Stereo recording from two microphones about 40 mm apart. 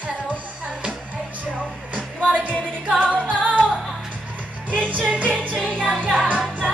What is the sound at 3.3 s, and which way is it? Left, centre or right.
Music, left.